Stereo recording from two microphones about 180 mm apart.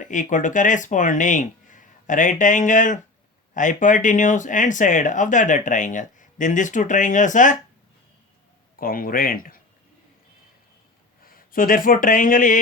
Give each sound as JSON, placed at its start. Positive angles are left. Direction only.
{"t": 0.0, "sound": "speech", "side_deg": 45}
{"t": 8.8, "sound": "speech", "side_deg": 50}
{"t": 11.3, "sound": "speech", "side_deg": 50}